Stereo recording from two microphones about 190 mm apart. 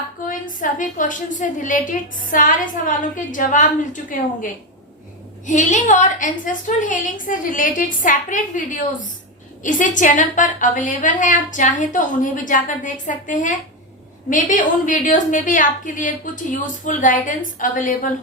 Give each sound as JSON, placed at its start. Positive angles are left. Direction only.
{"t": 0.3, "sound": "a woman's voice", "side_deg": 45}
{"t": 5.5, "sound": "a woman's voice", "side_deg": 40}